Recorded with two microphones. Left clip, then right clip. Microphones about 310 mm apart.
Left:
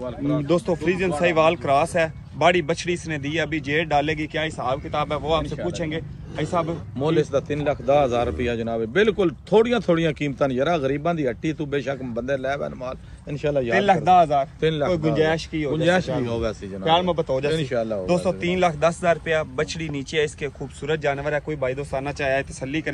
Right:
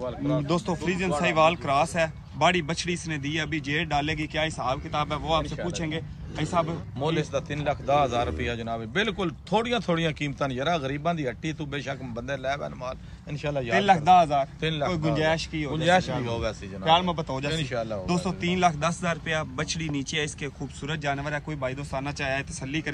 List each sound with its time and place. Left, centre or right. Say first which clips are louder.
0.3 s a man's voice: left 6 dB; centre
7.0 s a man's voice: left 7 dB; right
13.7 s a man's voice: left 1 dB; centre
14.6 s a man's voice: left 6 dB; right
14.9 s a man's voice: left 2 dB; centre
15.7 s a man's voice: left 2 dB; right
16.8 s a man's voice: left 3 dB; centre
17.5 s a man's voice: left 6 dB; right
18.0 s a man's voice: left 7 dB; centre